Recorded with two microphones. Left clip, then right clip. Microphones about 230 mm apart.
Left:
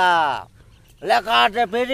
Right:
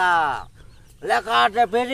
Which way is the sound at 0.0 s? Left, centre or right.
Left.